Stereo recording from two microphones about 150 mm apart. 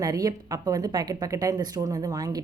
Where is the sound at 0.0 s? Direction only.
25° right (ahead or behind).